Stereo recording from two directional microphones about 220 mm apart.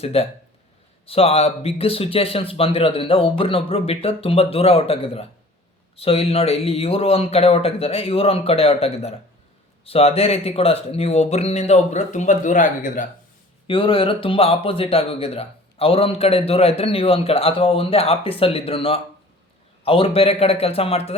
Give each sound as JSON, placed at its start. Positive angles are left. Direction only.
{"t": 0.0, "sound": "speech", "side_deg": 25}
{"t": 13.7, "sound": "speech", "side_deg": 25}